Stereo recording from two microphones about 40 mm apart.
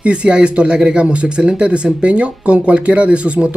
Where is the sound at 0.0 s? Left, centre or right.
Right.